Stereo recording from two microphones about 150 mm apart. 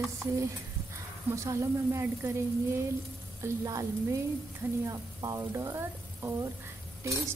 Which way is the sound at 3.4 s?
20° right (ahead or behind).